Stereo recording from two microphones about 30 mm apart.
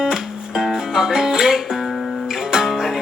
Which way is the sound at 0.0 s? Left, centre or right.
Centre.